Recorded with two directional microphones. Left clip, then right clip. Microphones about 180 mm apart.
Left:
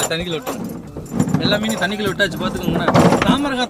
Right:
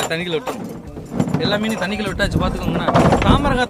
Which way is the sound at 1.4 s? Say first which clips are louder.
Left 2 dB; 20° right (ahead or behind).